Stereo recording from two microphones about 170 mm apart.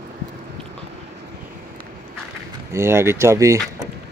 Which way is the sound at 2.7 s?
15° right (ahead or behind).